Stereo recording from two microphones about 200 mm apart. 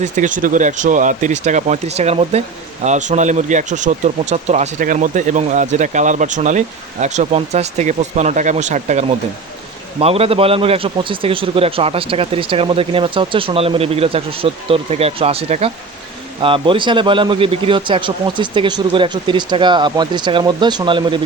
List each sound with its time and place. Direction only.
0.0 s a man's voice: 40° right (ahead or behind); by 21.2 s 25° right (ahead or behind)